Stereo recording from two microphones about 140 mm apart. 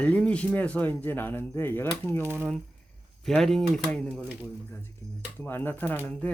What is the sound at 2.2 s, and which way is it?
Speech, 15° right (ahead or behind).